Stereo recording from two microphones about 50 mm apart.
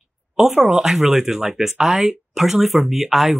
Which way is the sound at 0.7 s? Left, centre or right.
Centre.